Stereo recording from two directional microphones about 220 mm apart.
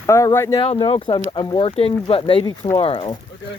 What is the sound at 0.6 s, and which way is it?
Speech, 25° left (ahead or behind).